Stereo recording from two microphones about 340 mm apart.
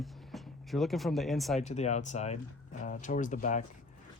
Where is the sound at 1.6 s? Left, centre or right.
Centre.